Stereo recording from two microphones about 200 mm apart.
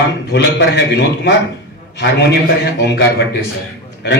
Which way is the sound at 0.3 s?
60° left (ahead or behind).